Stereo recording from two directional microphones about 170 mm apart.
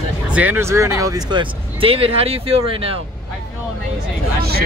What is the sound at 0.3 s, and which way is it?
Speech, 10° right (ahead or behind).